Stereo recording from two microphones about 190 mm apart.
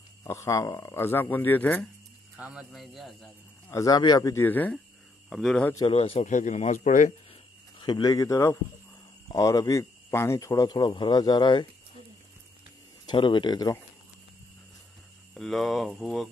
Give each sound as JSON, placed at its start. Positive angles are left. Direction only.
{"t": 0.2, "sound": "speech", "side_deg": 15}
{"t": 2.3, "sound": "a man's voice", "side_deg": -5}
{"t": 3.6, "sound": "a man's voice", "side_deg": 15}
{"t": 5.9, "sound": "a man's voice", "side_deg": 30}
{"t": 7.8, "sound": "speech", "side_deg": 20}
{"t": 13.0, "sound": "speech", "side_deg": 25}
{"t": 15.3, "sound": "a man's voice", "side_deg": 0}